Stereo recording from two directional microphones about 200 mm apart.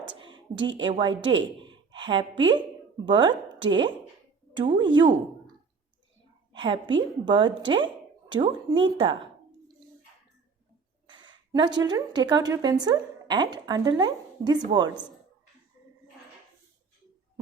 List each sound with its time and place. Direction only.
0.2 s a woman's voice: 25° right (ahead or behind)
6.5 s a woman's voice: 25° right (ahead or behind)
11.0 s a woman's voice: 20° right (ahead or behind)